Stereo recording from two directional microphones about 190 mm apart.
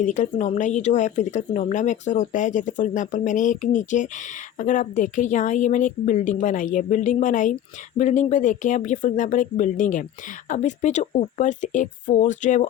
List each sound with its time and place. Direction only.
0.0 s speech: 40° left (ahead or behind)